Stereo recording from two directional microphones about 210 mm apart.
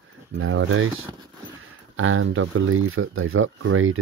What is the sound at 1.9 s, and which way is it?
Speech, 70° right (ahead or behind).